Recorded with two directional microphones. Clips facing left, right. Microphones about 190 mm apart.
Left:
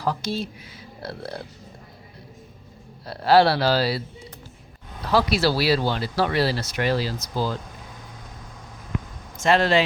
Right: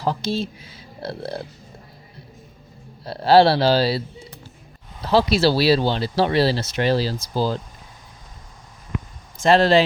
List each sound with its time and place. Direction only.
0.0 s speech: 25° right (ahead or behind)
3.1 s speech: 30° right (ahead or behind)
5.1 s speech: 25° right (ahead or behind)
9.4 s speech: 35° right (ahead or behind)